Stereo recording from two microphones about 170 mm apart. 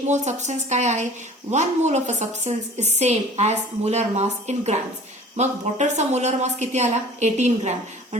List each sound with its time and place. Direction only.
0.1 s a woman's voice: 45° right (ahead or behind)